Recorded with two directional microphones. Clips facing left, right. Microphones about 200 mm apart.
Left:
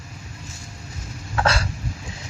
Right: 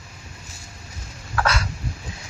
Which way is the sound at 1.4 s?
30° left (ahead or behind).